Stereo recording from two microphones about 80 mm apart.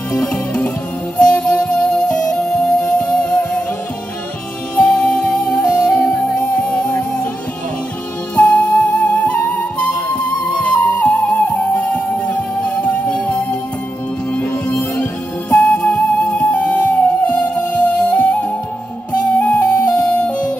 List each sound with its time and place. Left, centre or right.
0.1 s music: centre
4.7 s music: centre
8.4 s music: centre